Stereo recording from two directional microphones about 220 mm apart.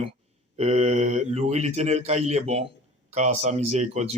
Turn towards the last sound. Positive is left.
turn(degrees=-30)  # may be behind; listen again after turning